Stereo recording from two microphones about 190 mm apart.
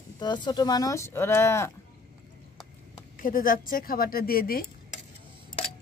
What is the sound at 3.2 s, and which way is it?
Speech, 45° left (ahead or behind).